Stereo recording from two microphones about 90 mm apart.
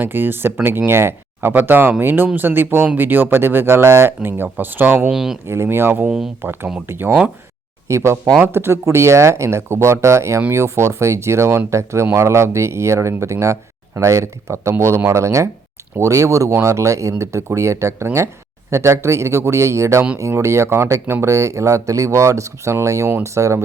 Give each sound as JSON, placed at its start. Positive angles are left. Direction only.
{"t": 0.0, "sound": "speech", "side_deg": -25}
{"t": 5.1, "sound": "speech", "side_deg": -5}
{"t": 5.5, "sound": "speech", "side_deg": -25}